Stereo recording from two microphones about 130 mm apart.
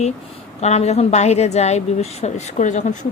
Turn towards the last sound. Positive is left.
turn(degrees=70)  # may be behind; listen again after turning